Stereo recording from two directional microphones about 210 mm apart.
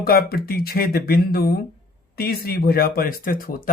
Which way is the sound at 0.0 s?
45° left (ahead or behind).